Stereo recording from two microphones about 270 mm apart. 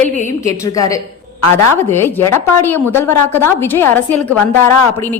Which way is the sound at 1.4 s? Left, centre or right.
Left.